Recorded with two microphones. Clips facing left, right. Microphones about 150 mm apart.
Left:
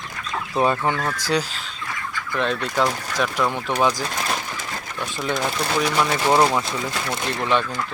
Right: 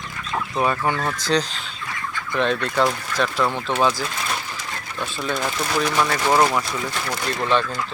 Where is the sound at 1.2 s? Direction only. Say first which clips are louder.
Right 1 dB; 10° left (ahead or behind).